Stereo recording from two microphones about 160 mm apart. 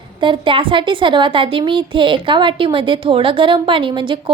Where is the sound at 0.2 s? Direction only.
30° right (ahead or behind).